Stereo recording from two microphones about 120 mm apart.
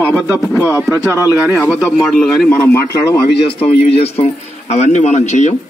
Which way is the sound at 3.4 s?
55° left (ahead or behind).